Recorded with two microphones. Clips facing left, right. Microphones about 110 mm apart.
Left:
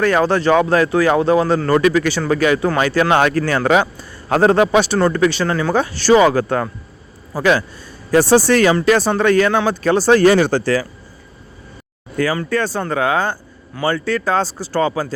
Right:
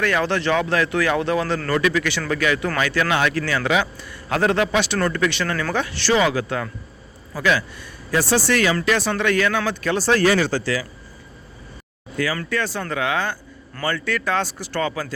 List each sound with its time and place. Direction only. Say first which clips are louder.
0.0 s speech: left 6 dB; 40° left (ahead or behind)
3.1 s speech: left 6 dB; 45° left (ahead or behind)
4.9 s speech: left 6 dB; 30° left (ahead or behind); by 10.8 s 55° left (ahead or behind)
12.1 s speech: left 5 dB; 45° left (ahead or behind)